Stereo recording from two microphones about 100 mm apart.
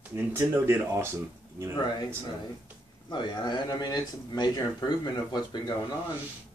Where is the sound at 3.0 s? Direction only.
50° left (ahead or behind).